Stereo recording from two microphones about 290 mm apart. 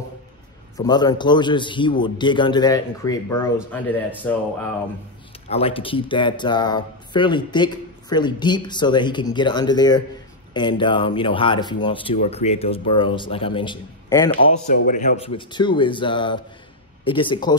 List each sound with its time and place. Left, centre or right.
0.7 s speech: centre
5.5 s speech: centre
14.7 s speech: left